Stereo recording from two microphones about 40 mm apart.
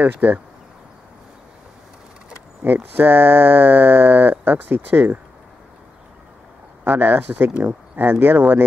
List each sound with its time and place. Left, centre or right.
0.0 s speech: right
2.6 s speech: right
6.8 s speech: right
7.5 s speech: right